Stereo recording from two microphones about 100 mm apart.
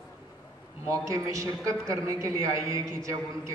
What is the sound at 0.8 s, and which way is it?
A man's voice, 35° right (ahead or behind).